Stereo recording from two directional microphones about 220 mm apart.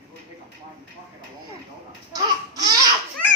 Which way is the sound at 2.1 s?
20° right (ahead or behind).